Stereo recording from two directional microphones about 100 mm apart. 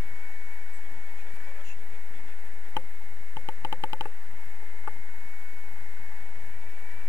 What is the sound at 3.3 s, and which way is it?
Clicking, 30° left (ahead or behind).